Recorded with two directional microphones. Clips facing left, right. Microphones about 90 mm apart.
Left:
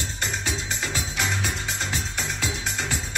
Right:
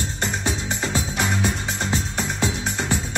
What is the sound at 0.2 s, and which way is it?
Music, 30° right (ahead or behind).